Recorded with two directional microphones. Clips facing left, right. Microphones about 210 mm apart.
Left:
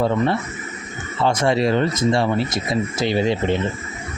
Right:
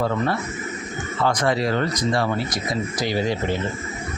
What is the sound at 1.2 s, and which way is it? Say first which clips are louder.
Speech: left 3 dB; 25° left (ahead or behind).